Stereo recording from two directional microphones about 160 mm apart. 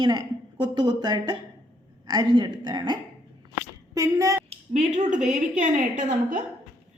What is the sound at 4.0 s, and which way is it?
Speech, 20° right (ahead or behind).